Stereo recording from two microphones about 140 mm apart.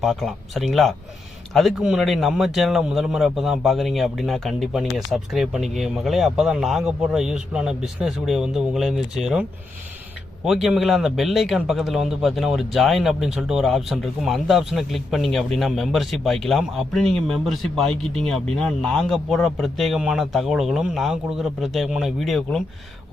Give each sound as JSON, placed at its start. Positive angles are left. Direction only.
{"t": 0.0, "sound": "a man's voice", "side_deg": 0}